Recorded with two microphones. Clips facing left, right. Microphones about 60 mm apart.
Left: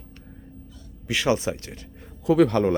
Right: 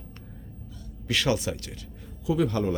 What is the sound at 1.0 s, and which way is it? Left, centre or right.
Speech, centre.